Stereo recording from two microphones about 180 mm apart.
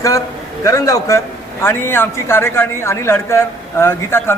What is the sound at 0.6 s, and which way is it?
A woman's voice, 20° left (ahead or behind).